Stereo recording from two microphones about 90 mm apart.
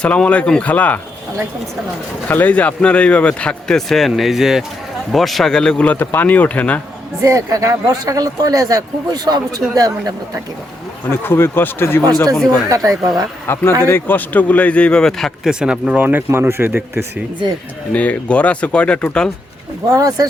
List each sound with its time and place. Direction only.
0.0 s speech: 10° left (ahead or behind)
2.2 s speech: 20° left (ahead or behind)
7.2 s speech: 35° right (ahead or behind)
11.1 s speech: 25° left (ahead or behind)
12.1 s speech: 5° left (ahead or behind)
12.5 s speech: 40° right (ahead or behind)
13.5 s speech: 25° left (ahead or behind); by 15.3 s 10° left (ahead or behind)
15.4 s a man's voice: 10° right (ahead or behind); by 17.1 s 25° right (ahead or behind)
17.9 s speech: 15° left (ahead or behind)
19.9 s speech: 45° right (ahead or behind)